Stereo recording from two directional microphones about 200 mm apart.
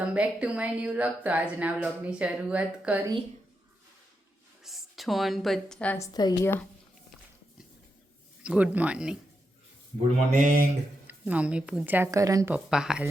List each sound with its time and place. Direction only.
0.1 s speech: 5° right (ahead or behind)
4.6 s a woman's voice: centre (ahead or behind)
8.4 s a woman's voice: 5° right (ahead or behind)
10.3 s speech: 40° right (ahead or behind)
11.0 s speech: 10° right (ahead or behind)
12.5 s a woman's voice: 5° right (ahead or behind)